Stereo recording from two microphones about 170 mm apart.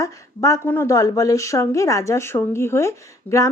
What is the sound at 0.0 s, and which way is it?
Speech, 20° left (ahead or behind).